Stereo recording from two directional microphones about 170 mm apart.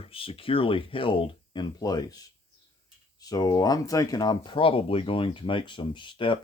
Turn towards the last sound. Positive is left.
turn(degrees=30)  # may be behind; listen again after turning